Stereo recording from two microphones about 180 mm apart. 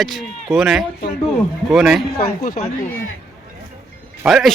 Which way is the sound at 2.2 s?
55° left (ahead or behind).